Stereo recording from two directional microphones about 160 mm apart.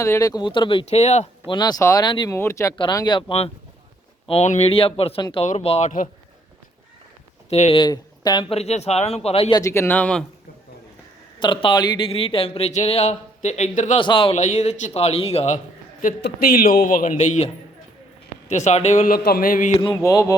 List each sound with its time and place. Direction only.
0.0 s speech: 20° left (ahead or behind); by 1.3 s 45° left (ahead or behind)
1.5 s speech: 25° left (ahead or behind)
5.5 s a man's voice: 45° left (ahead or behind)
7.5 s a man's voice: 40° left (ahead or behind)
7.8 s speech: 25° left (ahead or behind)
9.6 s speech: 20° left (ahead or behind)
11.3 s speech: 30° left (ahead or behind); by 14.0 s 45° left (ahead or behind)
14.0 s speech: 30° left (ahead or behind)
14.3 s a man's voice: 45° left (ahead or behind)
16.2 s a man's voice: 70° left (ahead or behind)
19.8 s speech: 20° left (ahead or behind)